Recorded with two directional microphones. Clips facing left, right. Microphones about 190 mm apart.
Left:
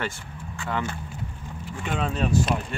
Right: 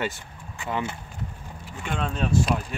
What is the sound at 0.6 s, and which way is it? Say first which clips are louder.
Speech: even; 15° right (ahead or behind).